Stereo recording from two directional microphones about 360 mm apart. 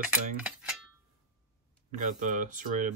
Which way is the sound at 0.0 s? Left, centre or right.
Centre.